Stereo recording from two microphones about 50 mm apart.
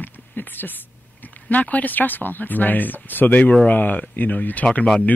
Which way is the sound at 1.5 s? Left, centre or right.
Left.